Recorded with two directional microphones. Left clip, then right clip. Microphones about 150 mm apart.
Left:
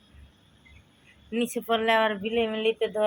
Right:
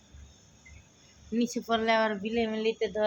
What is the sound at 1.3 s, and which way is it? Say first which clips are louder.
Speech: left 3 dB; 10° right (ahead or behind).